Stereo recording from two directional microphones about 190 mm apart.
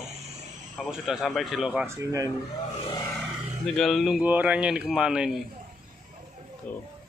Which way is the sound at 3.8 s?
Centre (ahead or behind).